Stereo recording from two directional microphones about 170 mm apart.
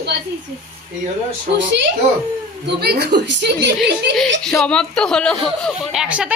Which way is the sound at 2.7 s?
70° right (ahead or behind).